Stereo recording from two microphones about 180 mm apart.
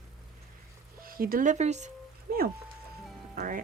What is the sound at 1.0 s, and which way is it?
Speech, 55° right (ahead or behind).